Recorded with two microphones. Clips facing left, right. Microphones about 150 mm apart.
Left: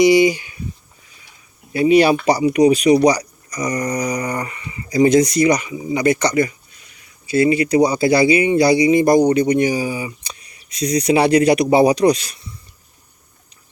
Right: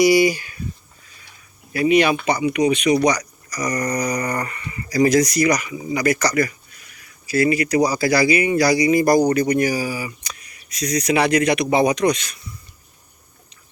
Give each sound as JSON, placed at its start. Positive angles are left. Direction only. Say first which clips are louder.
{"t": 0.0, "sound": "speech", "louder": "left 3 dB", "side_deg": 20}
{"t": 1.7, "sound": "speech", "louder": "left 4 dB", "side_deg": 30}